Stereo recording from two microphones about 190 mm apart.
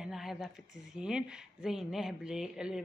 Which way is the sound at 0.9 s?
5° right (ahead or behind).